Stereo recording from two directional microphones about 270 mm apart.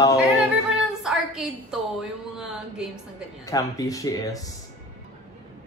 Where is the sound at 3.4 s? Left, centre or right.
Centre.